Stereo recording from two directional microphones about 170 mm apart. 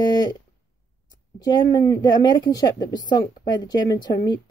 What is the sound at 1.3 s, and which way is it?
A woman's voice, 20° left (ahead or behind).